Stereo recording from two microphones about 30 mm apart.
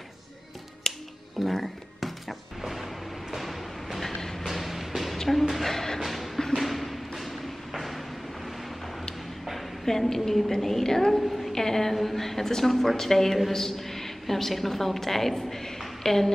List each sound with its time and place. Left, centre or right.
0.8 s music: centre
1.4 s a sound: centre
2.6 s music: centre
4.2 s music: centre
4.5 s music: centre
5.1 s music: centre
5.6 s a sound: centre
6.0 s music: centre
6.5 s thump: centre
9.8 s a woman's voice: centre
11.1 s a sound: centre
11.5 s a woman's voice: centre